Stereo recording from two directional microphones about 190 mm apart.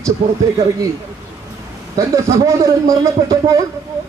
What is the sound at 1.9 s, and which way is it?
A man's voice, 15° right (ahead or behind).